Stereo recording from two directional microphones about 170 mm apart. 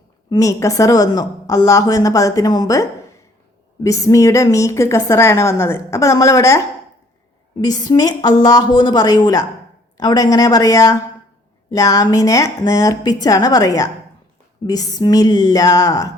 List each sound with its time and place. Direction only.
0.3 s speech: 20° left (ahead or behind)
3.8 s a woman's voice: 20° left (ahead or behind)
7.6 s speech: 25° left (ahead or behind)